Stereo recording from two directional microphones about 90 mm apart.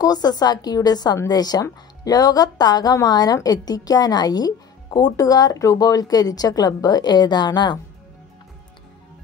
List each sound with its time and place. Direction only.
0.0 s a woman's voice: 45° left (ahead or behind)